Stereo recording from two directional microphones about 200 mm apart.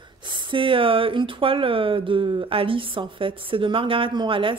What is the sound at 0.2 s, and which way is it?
Speech, 25° right (ahead or behind).